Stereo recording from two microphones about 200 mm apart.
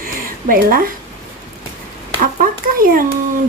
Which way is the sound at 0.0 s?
45° right (ahead or behind).